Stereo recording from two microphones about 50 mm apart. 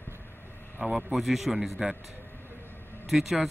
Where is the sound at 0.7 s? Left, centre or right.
Centre.